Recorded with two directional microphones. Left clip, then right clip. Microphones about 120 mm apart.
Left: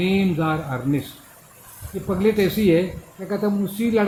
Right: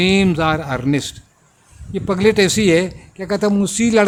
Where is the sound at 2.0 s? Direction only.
65° right (ahead or behind).